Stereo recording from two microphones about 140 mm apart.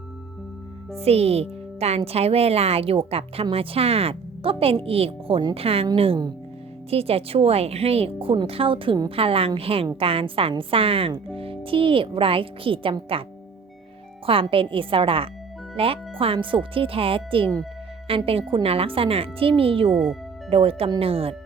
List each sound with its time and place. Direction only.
0.9 s speech: 45° right (ahead or behind)
6.9 s speech: 45° right (ahead or behind)
14.3 s speech: 40° right (ahead or behind)
19.9 s speech: centre (ahead or behind)
20.5 s speech: 40° right (ahead or behind)